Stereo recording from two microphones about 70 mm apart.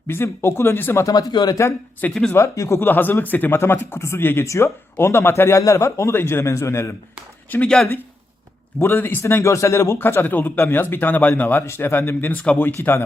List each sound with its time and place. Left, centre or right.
0.1 s speech: left
1.0 s speech: left
2.3 s speech: left
2.8 s speech: left
4.4 s speech: left
7.5 s speech: left
8.8 s speech: left
9.2 s speech: left
11.6 s speech: left